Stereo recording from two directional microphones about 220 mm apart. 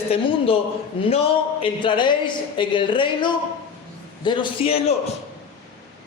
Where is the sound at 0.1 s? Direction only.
25° left (ahead or behind).